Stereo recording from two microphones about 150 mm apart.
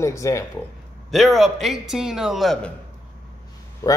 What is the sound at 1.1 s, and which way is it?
A man's voice, centre (ahead or behind).